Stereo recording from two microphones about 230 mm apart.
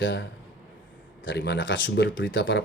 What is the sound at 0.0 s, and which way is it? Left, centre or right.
Speech, left.